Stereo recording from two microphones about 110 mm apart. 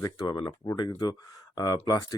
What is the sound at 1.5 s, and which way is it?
Speech, 35° left (ahead or behind).